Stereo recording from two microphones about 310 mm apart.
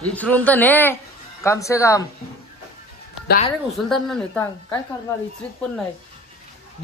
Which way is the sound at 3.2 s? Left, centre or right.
Left.